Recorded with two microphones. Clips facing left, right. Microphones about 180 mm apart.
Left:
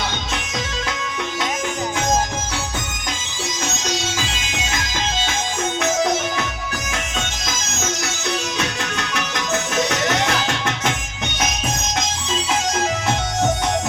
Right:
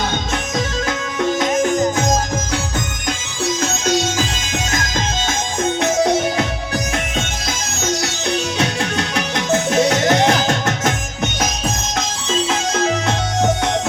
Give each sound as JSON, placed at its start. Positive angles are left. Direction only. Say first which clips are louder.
{"t": 1.4, "sound": "music", "louder": "right 7 dB", "side_deg": -45}
{"t": 3.8, "sound": "music", "louder": "right 9 dB", "side_deg": -50}
{"t": 5.8, "sound": "music", "louder": "right 4 dB", "side_deg": -30}
{"t": 8.5, "sound": "music", "louder": "right 5 dB", "side_deg": -30}